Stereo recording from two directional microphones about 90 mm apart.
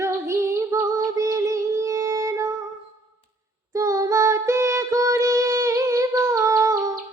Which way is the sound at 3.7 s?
40° right (ahead or behind).